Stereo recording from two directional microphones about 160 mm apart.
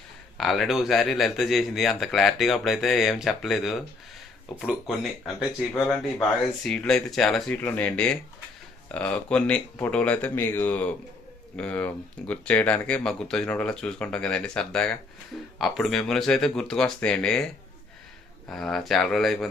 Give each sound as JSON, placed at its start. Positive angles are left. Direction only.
{"t": 0.3, "sound": "speech", "side_deg": 0}
{"t": 18.5, "sound": "speech", "side_deg": 0}